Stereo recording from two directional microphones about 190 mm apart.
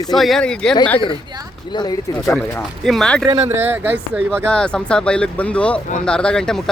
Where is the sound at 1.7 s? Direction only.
20° left (ahead or behind).